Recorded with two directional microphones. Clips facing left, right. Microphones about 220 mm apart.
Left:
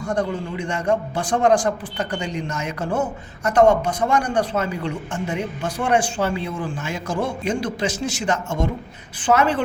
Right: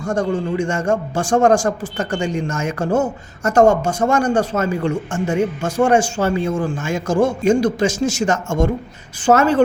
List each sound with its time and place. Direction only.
0.0 s speech: 45° right (ahead or behind)